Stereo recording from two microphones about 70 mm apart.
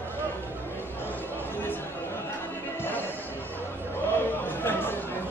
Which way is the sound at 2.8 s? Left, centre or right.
Left.